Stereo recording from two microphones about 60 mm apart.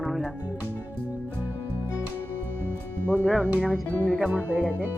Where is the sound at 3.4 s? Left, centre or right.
Right.